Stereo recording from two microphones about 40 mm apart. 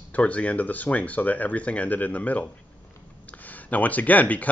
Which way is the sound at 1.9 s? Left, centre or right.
Left.